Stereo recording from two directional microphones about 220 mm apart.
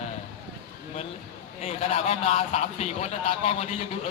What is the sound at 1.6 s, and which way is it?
A man's voice, 30° left (ahead or behind).